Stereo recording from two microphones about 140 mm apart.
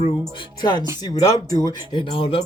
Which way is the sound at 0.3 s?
30° left (ahead or behind).